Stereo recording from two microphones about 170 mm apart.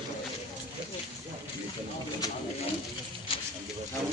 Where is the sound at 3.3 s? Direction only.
35° left (ahead or behind).